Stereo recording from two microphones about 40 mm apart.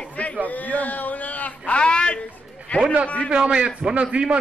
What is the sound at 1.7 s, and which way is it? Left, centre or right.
Speech, left.